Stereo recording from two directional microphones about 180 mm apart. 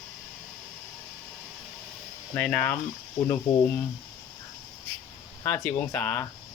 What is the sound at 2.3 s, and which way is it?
Speech, 10° left (ahead or behind).